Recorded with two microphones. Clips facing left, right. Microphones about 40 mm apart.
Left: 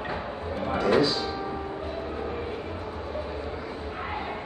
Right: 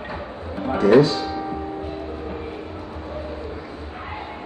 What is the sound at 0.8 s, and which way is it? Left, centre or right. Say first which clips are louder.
Speech: right 8 dB; right.